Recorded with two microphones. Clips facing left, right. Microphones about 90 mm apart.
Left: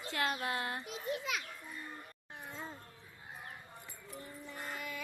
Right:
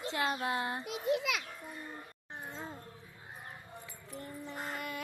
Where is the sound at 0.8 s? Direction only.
75° right (ahead or behind).